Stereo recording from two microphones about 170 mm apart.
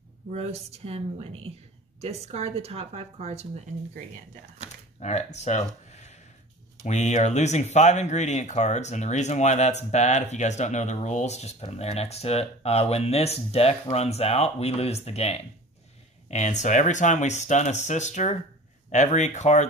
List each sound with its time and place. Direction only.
0.3 s speech: 40° right (ahead or behind)
5.0 s speech: 40° left (ahead or behind)
5.9 s a sound: 40° left (ahead or behind)
6.8 s speech: 40° left (ahead or behind)